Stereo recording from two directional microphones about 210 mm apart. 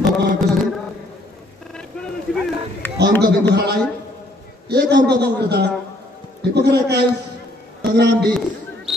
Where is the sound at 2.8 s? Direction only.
10° left (ahead or behind).